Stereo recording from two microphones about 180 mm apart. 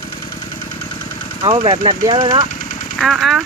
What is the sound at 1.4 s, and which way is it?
Speech, 25° right (ahead or behind).